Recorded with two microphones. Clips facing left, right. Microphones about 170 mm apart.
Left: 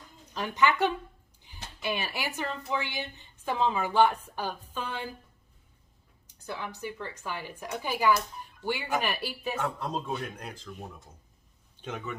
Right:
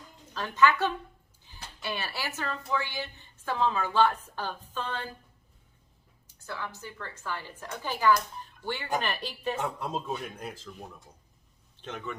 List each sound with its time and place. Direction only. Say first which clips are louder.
0.3 s a woman's voice: right 1 dB; 15° left (ahead or behind)
6.2 s a woman's voice: left 1 dB; 15° left (ahead or behind)
9.6 s a man's voice: even; 10° right (ahead or behind)
10.1 s speech: even; centre (ahead or behind)
11.8 s speech: left 1 dB; 5° left (ahead or behind)